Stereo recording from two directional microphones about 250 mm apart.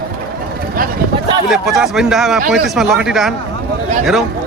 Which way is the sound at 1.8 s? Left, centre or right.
Centre.